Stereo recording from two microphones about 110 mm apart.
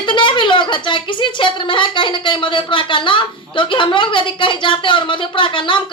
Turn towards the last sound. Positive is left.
turn(degrees=50)  # may be behind; listen again after turning